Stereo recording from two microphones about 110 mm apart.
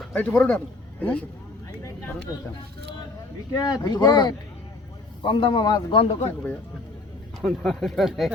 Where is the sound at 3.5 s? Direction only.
35° left (ahead or behind).